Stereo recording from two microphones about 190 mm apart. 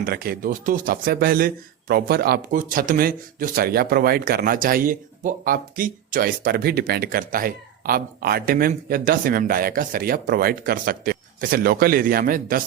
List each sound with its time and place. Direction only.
0.0 s speech: 55° right (ahead or behind)